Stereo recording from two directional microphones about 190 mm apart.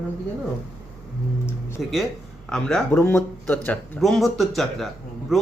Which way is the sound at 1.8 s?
Centre (ahead or behind).